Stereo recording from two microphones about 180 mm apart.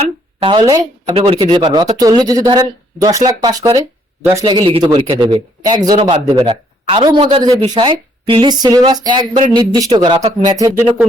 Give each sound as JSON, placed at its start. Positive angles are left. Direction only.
{"t": 0.0, "sound": "a man's voice", "side_deg": -30}